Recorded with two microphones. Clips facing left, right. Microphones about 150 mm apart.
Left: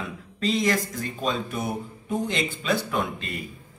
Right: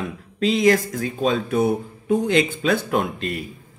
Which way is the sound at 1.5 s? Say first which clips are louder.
Right 10 dB; 65° right (ahead or behind).